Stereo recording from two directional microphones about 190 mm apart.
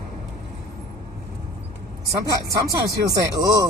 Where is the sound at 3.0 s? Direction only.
20° right (ahead or behind).